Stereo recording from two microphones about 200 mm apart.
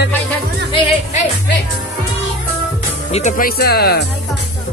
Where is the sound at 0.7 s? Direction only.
35° left (ahead or behind).